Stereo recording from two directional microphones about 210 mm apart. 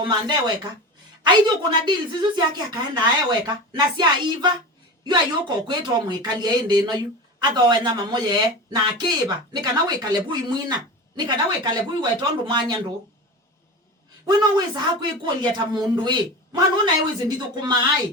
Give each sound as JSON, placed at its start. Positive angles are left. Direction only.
{"t": 0.0, "sound": "speech", "side_deg": -20}
{"t": 14.3, "sound": "speech", "side_deg": -20}